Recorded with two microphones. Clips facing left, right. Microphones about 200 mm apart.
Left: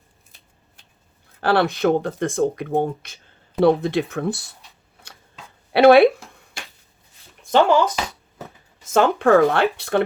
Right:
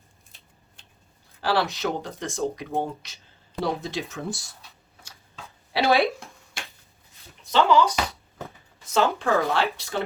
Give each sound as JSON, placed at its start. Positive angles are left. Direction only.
{"t": 1.4, "sound": "speech", "side_deg": 55}
{"t": 5.7, "sound": "speech", "side_deg": 60}
{"t": 7.4, "sound": "speech", "side_deg": 50}